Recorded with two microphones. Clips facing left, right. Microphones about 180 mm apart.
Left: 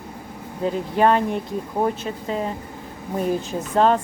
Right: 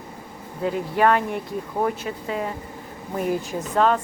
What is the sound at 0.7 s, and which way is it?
A woman's voice, 25° left (ahead or behind).